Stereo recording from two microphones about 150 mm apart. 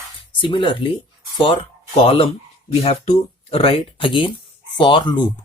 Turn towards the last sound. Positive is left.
turn(degrees=30)  # may be behind; listen again after turning